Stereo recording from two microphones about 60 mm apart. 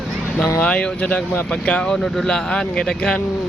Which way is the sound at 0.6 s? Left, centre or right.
Centre.